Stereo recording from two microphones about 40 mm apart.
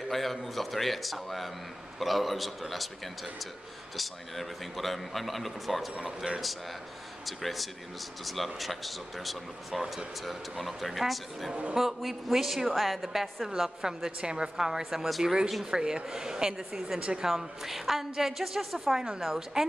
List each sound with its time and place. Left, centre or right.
0.1 s speech: centre
5.9 s a woman's voice: centre
6.4 s speech: centre
13.5 s a woman's voice: centre
14.8 s a woman's voice: centre
17.0 s a woman's voice: right
17.3 s a woman's voice: centre